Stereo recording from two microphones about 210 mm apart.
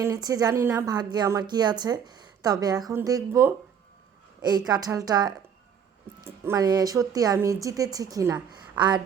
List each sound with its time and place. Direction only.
0.0 s speech: 15° right (ahead or behind)